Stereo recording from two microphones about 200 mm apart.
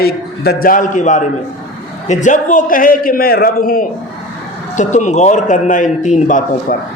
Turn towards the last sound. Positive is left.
turn(degrees=40)  # may be behind; listen again after turning